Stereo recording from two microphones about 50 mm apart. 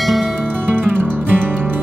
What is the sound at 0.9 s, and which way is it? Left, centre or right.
Music, right.